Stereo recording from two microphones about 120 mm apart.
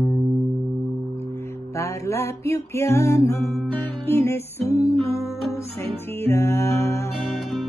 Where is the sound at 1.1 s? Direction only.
20° left (ahead or behind).